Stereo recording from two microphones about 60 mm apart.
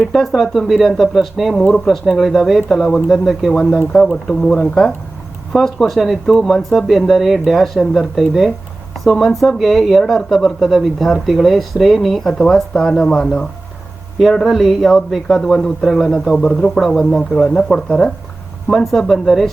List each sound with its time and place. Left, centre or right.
0.1 s speech: centre
3.9 s speech: centre
5.5 s speech: centre
14.2 s speech: centre
18.7 s speech: centre